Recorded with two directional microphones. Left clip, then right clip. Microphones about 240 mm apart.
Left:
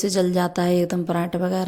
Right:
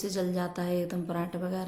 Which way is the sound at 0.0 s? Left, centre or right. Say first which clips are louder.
Left 11 dB; left.